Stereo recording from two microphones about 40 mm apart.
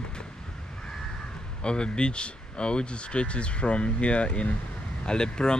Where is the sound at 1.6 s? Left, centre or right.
Left.